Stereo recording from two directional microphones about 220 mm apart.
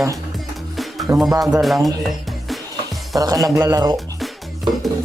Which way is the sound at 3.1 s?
15° right (ahead or behind).